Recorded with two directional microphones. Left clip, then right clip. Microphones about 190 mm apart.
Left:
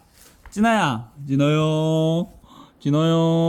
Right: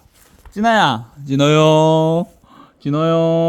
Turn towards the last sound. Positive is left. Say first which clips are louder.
# right 5 dB
turn(degrees=-5)  # may be behind; listen again after turning